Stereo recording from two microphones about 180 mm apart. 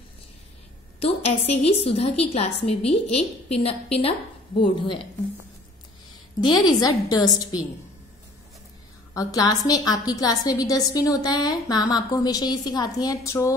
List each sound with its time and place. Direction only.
0.9 s a woman's voice: 35° left (ahead or behind)
6.4 s a woman's voice: 20° left (ahead or behind)
9.1 s a woman's voice: 20° left (ahead or behind)